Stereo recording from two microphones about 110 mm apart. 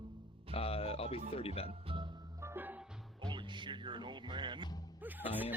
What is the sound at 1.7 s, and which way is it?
Music, 50° right (ahead or behind).